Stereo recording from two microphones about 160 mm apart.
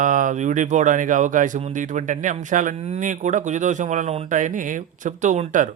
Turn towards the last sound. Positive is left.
turn(degrees=-50)  # may be behind; listen again after turning